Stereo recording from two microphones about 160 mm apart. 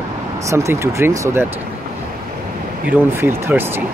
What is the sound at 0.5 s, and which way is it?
Speech, 15° right (ahead or behind).